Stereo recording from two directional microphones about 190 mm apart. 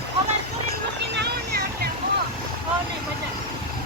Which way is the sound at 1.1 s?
60° right (ahead or behind).